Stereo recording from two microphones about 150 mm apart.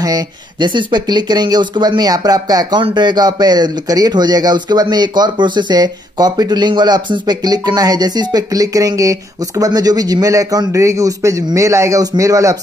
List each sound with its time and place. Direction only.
0.0 s speech: 25° right (ahead or behind)